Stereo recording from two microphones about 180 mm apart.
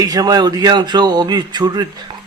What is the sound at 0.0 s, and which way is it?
A man's voice, 20° right (ahead or behind).